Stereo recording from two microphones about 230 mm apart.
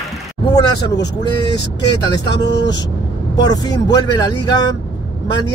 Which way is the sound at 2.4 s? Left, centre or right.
Left.